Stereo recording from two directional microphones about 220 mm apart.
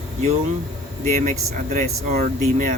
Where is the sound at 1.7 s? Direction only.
35° right (ahead or behind).